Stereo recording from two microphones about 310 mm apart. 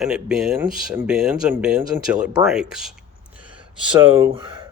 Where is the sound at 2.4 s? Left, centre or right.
Centre.